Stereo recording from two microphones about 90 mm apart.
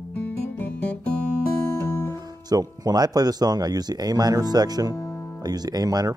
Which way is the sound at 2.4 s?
45° right (ahead or behind).